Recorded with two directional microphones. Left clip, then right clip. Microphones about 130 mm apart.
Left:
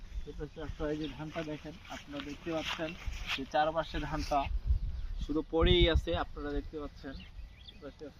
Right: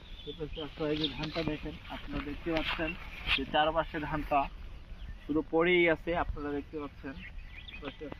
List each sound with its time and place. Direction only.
0.3 s speech: centre (ahead or behind)
1.9 s speech: 10° left (ahead or behind)
5.3 s speech: 15° right (ahead or behind)
6.3 s speech: 30° right (ahead or behind)